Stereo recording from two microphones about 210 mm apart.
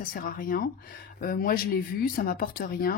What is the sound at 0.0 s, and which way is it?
Speech, 40° left (ahead or behind).